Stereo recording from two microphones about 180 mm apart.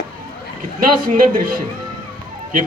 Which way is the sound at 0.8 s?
50° right (ahead or behind).